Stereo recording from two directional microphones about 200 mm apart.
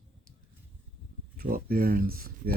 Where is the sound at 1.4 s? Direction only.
50° right (ahead or behind).